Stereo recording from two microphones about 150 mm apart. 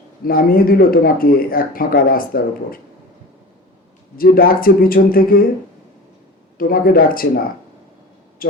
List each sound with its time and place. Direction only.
0.3 s speech: 75° left (ahead or behind)
4.2 s speech: 75° left (ahead or behind)
6.6 s speech: 75° left (ahead or behind)
8.4 s a man's voice: 75° left (ahead or behind)